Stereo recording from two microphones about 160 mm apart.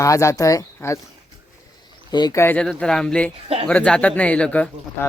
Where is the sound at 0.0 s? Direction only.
20° left (ahead or behind).